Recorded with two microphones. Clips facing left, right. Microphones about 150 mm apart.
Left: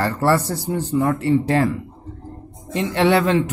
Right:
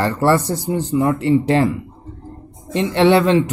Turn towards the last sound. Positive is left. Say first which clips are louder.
# right 3 dB
turn(degrees=-20)  # may be behind; listen again after turning